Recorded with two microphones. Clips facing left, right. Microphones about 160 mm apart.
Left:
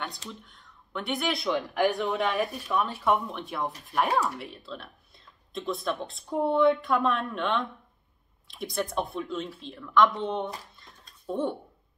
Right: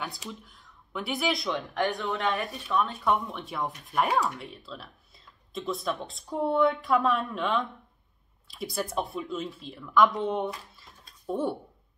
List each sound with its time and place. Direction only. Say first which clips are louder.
0.3 s speech: right 1 dB; 5° right (ahead or behind)
2.0 s speech: left 2 dB; 15° left (ahead or behind)
2.3 s speech: left 1 dB; centre (ahead or behind)